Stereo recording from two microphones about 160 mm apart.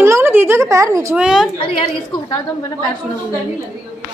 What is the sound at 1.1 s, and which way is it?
Speech, 5° right (ahead or behind).